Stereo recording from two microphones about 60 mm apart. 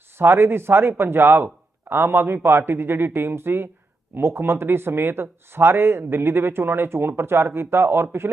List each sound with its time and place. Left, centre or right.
0.2 s speech: right